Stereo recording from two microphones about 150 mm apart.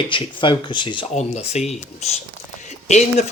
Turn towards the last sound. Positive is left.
turn(degrees=50)  # may be behind; listen again after turning